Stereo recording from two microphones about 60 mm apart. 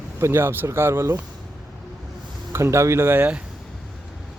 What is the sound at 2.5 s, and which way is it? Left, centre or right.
Speech, right.